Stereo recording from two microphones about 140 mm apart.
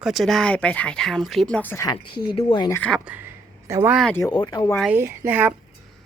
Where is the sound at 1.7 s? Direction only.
25° left (ahead or behind).